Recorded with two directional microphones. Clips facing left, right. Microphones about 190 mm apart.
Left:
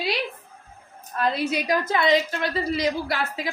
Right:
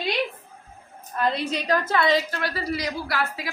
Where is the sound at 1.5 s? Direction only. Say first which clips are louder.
Even; 10° left (ahead or behind).